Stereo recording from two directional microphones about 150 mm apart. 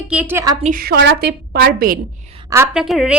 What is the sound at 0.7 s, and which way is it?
A woman's voice, 90° right.